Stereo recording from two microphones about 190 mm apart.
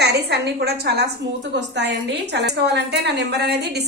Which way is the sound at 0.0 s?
60° right (ahead or behind).